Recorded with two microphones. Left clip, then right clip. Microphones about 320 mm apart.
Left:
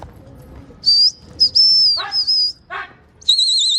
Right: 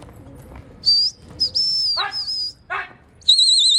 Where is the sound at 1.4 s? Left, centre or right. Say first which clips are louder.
Left 8 dB; centre.